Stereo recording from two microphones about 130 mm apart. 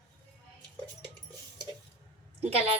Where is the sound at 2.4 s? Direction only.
50° right (ahead or behind).